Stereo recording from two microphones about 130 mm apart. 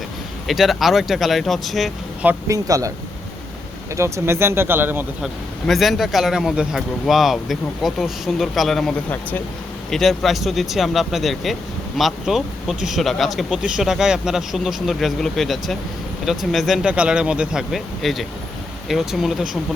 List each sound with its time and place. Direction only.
0.4 s speech: centre (ahead or behind)
2.5 s speech: 25° right (ahead or behind)
3.9 s speech: 20° right (ahead or behind)
5.2 s speech: centre (ahead or behind)